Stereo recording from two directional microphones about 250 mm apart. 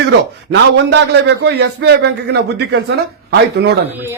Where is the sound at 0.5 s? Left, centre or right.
Right.